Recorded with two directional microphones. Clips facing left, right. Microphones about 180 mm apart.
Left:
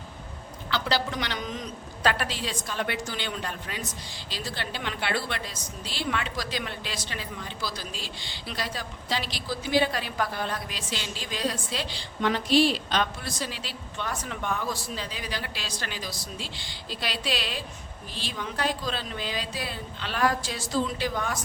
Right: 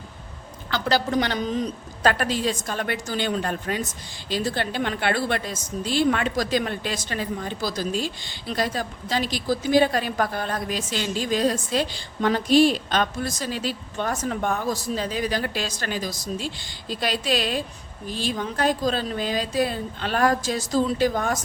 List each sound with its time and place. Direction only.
0.7 s a woman's voice: 45° right (ahead or behind)